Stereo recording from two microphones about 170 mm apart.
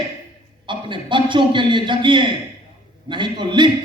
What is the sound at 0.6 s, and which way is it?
A man's voice, 30° right (ahead or behind).